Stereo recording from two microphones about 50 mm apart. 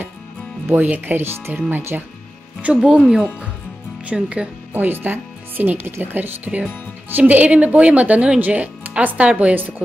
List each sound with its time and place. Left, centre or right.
0.7 s speech: right
1.2 s speech: right
2.6 s a woman's voice: right
4.0 s speech: right
4.8 s a woman's voice: right